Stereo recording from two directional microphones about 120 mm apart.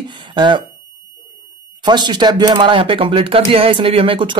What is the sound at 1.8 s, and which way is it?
Speech, 40° right (ahead or behind).